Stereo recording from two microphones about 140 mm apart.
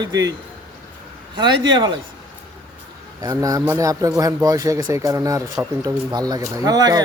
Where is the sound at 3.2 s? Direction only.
25° right (ahead or behind).